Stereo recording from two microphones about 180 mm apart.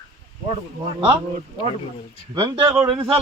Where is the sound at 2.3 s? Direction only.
25° right (ahead or behind).